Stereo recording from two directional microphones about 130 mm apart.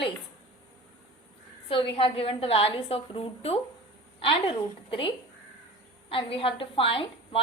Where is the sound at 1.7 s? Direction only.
40° left (ahead or behind).